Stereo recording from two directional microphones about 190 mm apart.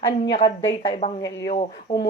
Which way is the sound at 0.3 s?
25° left (ahead or behind).